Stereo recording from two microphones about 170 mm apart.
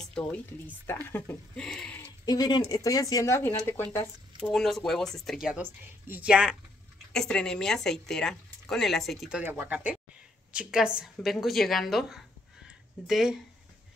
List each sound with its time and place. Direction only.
0.0 s speech: 5° left (ahead or behind)
2.2 s speech: 25° left (ahead or behind)
4.4 s speech: 5° left (ahead or behind)
7.1 s speech: 5° left (ahead or behind)
12.6 s a sound: centre (ahead or behind)